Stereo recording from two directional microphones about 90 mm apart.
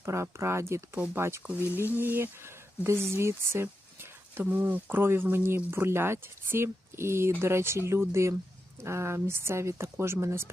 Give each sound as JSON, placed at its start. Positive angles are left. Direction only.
{"t": 0.0, "sound": "speech", "side_deg": -30}